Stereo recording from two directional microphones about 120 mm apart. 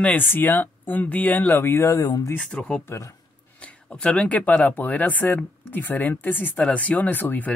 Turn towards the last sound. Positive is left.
turn(degrees=15)  # may be behind; listen again after turning